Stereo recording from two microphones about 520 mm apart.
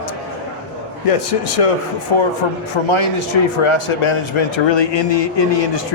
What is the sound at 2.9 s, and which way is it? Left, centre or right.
A man's voice, left.